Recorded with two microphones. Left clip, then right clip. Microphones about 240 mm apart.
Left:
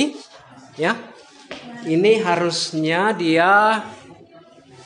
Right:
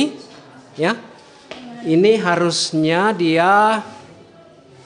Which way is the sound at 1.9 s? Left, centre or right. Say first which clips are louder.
Right 2 dB; right.